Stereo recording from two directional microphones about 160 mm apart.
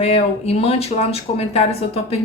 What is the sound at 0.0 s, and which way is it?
A woman's voice, 40° left (ahead or behind).